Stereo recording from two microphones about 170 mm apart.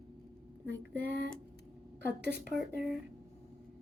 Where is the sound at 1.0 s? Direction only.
90° right.